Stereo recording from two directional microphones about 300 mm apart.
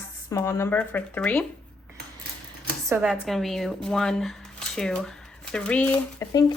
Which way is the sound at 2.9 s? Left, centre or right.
Centre.